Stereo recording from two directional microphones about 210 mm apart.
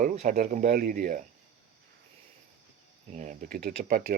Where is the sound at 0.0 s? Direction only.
40° right (ahead or behind).